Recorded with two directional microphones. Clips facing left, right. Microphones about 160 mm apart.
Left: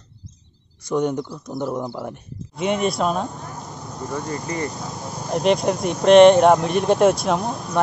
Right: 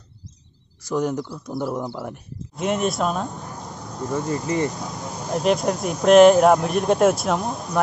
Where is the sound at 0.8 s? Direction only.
Centre (ahead or behind).